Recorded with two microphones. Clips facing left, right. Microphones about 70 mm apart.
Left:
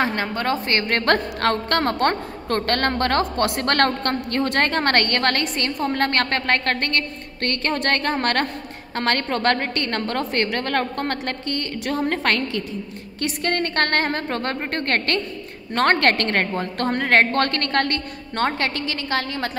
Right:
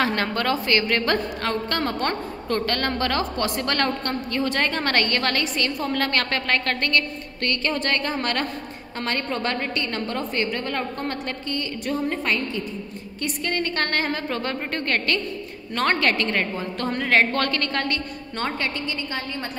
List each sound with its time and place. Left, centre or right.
0.0 s a woman's voice: left
0.7 s a woman's voice: left
13.2 s a woman's voice: left